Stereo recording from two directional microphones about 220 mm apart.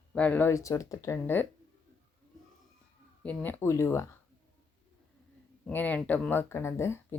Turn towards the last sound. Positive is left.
turn(degrees=10)  # may be behind; listen again after turning